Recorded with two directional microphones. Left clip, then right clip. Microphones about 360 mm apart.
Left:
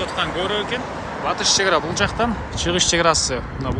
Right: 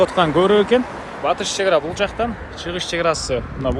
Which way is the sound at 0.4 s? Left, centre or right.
Centre.